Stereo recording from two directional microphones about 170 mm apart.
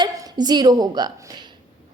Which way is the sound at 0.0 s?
25° right (ahead or behind).